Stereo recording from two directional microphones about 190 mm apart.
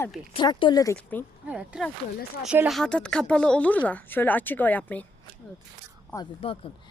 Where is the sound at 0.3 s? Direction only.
25° left (ahead or behind).